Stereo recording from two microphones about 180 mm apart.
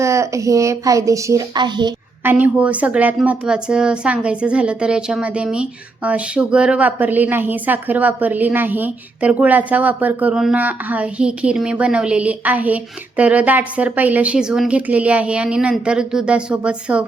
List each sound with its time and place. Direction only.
0.0 s a woman's voice: 15° right (ahead or behind)
2.2 s a woman's voice: 10° right (ahead or behind)